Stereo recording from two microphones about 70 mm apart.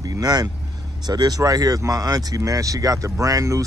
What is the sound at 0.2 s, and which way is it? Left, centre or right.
Speech, right.